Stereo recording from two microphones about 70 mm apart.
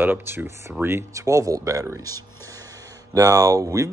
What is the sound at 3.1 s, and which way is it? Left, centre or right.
Speech, right.